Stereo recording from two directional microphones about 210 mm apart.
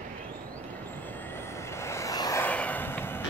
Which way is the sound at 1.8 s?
15° left (ahead or behind).